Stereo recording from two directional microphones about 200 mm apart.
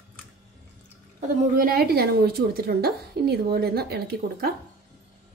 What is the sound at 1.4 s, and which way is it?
A woman's voice, 45° right (ahead or behind).